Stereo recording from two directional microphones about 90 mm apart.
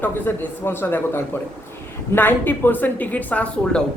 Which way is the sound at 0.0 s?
25° left (ahead or behind).